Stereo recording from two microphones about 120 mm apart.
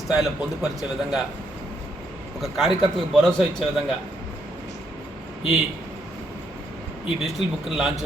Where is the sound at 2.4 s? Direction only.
Centre (ahead or behind).